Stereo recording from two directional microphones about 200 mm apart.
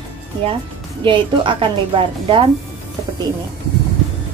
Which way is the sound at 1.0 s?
25° right (ahead or behind).